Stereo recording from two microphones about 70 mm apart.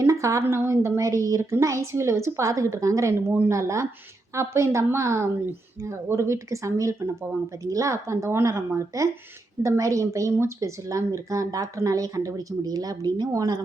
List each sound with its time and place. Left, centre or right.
0.0 s a woman's voice: right